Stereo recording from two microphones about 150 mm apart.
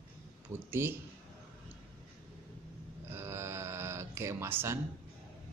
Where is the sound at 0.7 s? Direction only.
15° right (ahead or behind).